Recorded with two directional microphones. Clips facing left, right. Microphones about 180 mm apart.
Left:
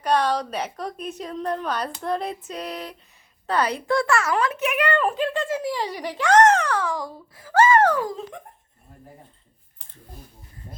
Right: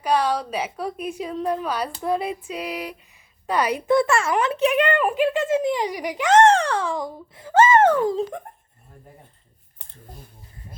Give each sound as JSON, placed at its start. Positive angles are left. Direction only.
{"t": 0.0, "sound": "a woman's voice", "side_deg": -5}
{"t": 4.9, "sound": "speech", "side_deg": -15}